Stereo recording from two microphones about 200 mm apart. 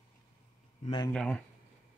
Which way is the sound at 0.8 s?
20° left (ahead or behind).